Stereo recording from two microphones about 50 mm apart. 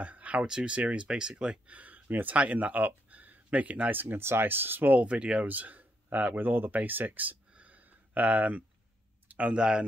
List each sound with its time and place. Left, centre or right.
0.0 s speech: right
2.0 s speech: right
2.3 s speech: right
3.1 s a sound: right
3.9 s speech: right
5.0 s speech: right
5.4 s speech: right